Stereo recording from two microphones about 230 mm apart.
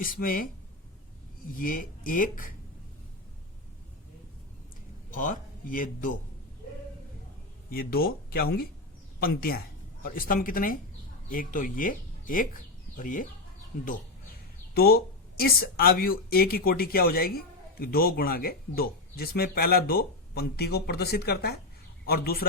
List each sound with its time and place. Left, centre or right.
0.0 s speech: left
1.5 s speech: left
5.1 s speech: left
7.7 s a man's voice: left